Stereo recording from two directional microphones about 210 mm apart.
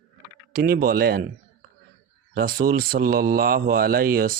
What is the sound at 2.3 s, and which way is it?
A man's voice, 45° right (ahead or behind).